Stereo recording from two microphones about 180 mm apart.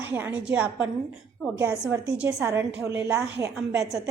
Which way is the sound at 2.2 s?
15° right (ahead or behind).